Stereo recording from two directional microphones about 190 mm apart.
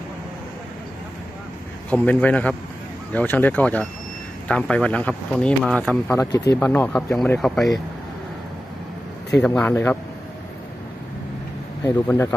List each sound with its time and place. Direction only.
1.9 s speech: 10° left (ahead or behind)
6.1 s speech: 20° left (ahead or behind); by 7.7 s centre (ahead or behind)
9.4 s speech: 10° left (ahead or behind)
11.8 s speech: 15° left (ahead or behind)